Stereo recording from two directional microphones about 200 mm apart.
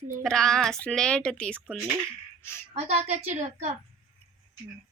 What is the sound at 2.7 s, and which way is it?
Speech, 30° right (ahead or behind).